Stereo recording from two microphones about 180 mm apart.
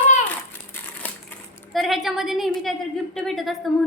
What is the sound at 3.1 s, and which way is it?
Speech, centre (ahead or behind).